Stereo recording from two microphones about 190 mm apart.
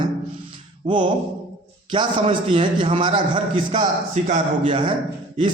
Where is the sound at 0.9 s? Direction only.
25° right (ahead or behind); by 4.7 s 40° right (ahead or behind).